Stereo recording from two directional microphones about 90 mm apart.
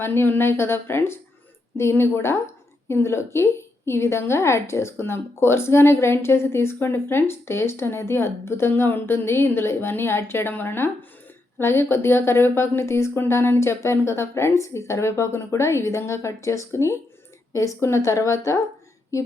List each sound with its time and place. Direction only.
0.0 s a woman's voice: 25° left (ahead or behind)